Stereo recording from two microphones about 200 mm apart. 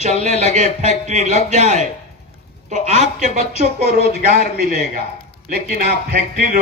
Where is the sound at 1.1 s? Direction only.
35° right (ahead or behind).